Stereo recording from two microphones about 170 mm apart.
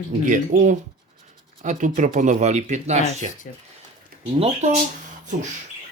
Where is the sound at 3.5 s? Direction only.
55° left (ahead or behind).